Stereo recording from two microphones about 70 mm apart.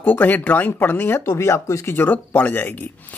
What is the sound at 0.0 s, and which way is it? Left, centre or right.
Speech, left.